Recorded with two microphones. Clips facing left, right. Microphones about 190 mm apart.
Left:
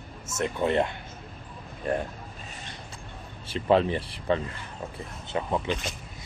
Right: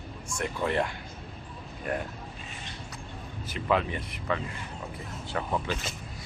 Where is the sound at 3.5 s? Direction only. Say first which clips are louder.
Left 5 dB; 30° left (ahead or behind).